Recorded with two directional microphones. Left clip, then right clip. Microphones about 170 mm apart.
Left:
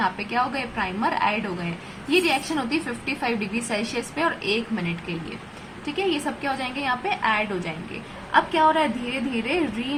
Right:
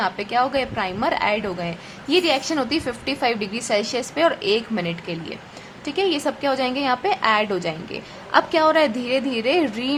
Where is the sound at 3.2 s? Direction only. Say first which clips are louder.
Right 5 dB; 35° right (ahead or behind).